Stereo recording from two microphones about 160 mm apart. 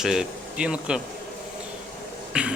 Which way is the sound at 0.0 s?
5° right (ahead or behind).